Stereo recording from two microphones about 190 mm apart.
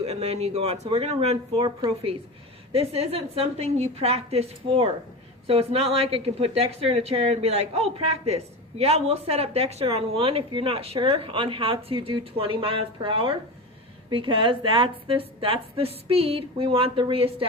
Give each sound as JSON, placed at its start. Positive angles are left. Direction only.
{"t": 0.0, "sound": "a woman's voice", "side_deg": -35}